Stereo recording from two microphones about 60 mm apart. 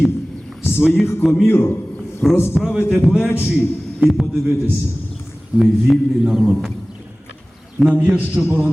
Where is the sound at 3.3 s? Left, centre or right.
Left.